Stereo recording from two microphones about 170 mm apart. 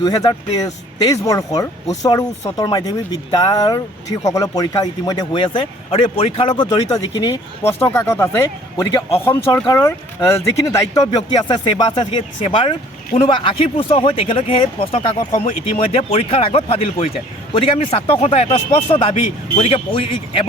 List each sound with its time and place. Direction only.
0.0 s speech: 20° left (ahead or behind)